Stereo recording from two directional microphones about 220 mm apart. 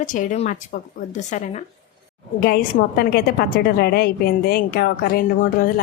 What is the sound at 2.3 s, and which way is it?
A woman's voice, 45° left (ahead or behind).